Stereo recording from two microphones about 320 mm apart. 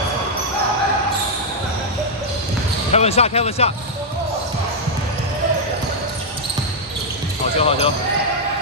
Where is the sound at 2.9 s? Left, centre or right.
Centre.